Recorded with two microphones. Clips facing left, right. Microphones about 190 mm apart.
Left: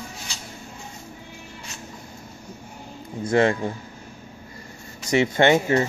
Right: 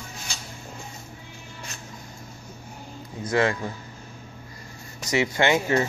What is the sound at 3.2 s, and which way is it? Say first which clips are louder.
Speech: left 4 dB; 25° left (ahead or behind).